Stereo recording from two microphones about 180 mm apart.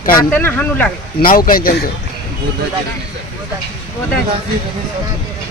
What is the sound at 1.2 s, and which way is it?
Speech, 50° left (ahead or behind).